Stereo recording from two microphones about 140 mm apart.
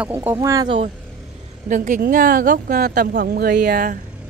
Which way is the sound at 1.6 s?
65° right (ahead or behind).